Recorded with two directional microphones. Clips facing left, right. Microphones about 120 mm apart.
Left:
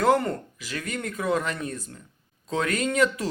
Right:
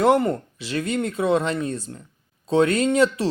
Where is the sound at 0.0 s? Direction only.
25° right (ahead or behind).